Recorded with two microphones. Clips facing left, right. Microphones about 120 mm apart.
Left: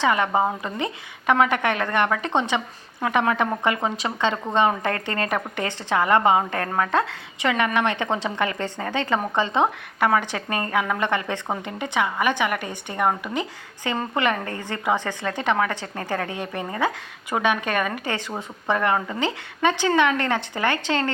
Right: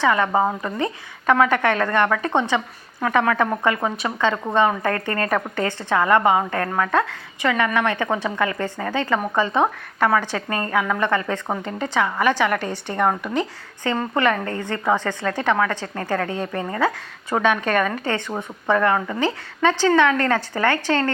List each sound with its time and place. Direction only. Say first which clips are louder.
0.0 s a woman's voice: right 2 dB; 20° left (ahead or behind)
16.3 s a woman's voice: right 4 dB; 35° right (ahead or behind)
16.6 s a woman's voice: right 2 dB; 20° left (ahead or behind)
17.8 s a woman's voice: right 3 dB; 35° right (ahead or behind)
18.3 s a woman's voice: right 4 dB; 25° left (ahead or behind)